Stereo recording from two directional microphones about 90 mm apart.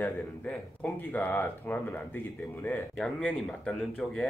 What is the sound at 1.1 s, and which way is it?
Speech, 25° left (ahead or behind).